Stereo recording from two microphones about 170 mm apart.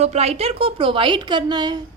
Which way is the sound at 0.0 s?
40° right (ahead or behind).